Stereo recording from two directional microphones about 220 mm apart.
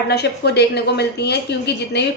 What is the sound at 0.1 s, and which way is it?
A woman's voice, 50° left (ahead or behind).